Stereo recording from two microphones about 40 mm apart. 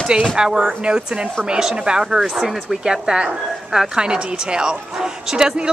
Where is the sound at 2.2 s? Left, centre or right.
Centre.